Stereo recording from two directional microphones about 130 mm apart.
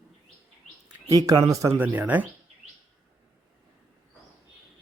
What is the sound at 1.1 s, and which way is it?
Speech, 25° right (ahead or behind).